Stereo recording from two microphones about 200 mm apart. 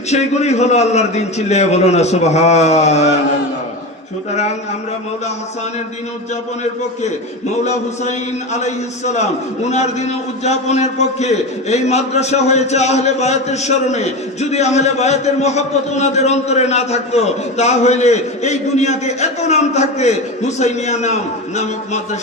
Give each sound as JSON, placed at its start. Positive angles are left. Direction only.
{"t": 0.1, "sound": "a man's voice", "side_deg": 35}
{"t": 7.6, "sound": "a man's voice", "side_deg": 35}